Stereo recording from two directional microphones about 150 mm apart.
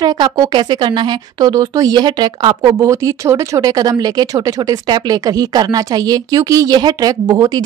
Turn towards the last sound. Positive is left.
turn(degrees=-25)  # may be behind; listen again after turning